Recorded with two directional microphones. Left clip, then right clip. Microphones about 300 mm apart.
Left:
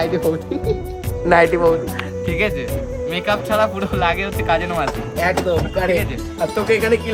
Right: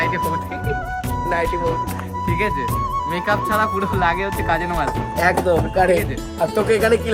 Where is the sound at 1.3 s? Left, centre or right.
Left.